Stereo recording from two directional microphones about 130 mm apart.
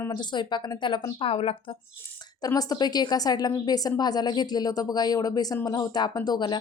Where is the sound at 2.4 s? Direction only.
30° left (ahead or behind).